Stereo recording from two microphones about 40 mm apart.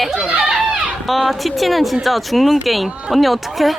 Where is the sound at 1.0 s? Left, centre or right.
Centre.